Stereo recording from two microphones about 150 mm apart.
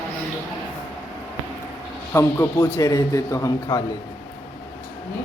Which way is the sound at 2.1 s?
20° left (ahead or behind).